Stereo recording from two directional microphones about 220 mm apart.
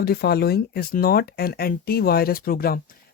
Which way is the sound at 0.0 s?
45° left (ahead or behind).